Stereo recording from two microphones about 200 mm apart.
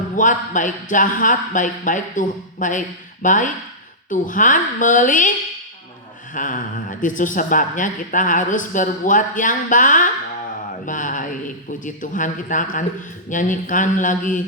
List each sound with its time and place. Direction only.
0.2 s a woman's voice: 40° left (ahead or behind)
6.3 s a woman's voice: 40° left (ahead or behind)